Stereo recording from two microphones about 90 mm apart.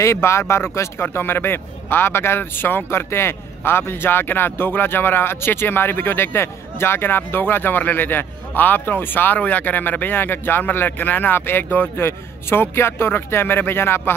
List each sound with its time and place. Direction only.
0.0 s speech: 30° left (ahead or behind)